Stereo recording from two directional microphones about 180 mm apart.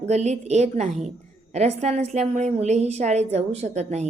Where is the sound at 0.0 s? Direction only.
40° right (ahead or behind).